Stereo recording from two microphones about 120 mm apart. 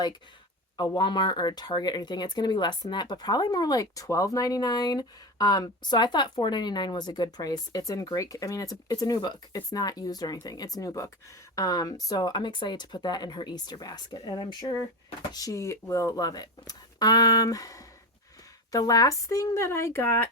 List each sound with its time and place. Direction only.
0.8 s speech: 40° left (ahead or behind); by 20.2 s 20° left (ahead or behind)